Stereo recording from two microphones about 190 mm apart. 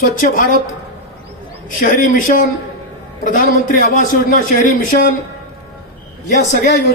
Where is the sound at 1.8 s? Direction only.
45° left (ahead or behind).